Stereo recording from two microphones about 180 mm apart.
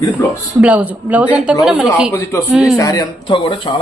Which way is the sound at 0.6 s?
10° right (ahead or behind).